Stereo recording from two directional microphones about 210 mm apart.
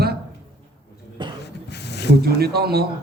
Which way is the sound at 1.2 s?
20° right (ahead or behind).